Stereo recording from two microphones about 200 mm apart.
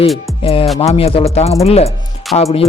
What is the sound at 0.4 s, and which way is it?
A man's voice, 30° left (ahead or behind).